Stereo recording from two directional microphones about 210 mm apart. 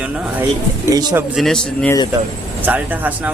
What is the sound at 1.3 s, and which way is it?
Speech, centre (ahead or behind).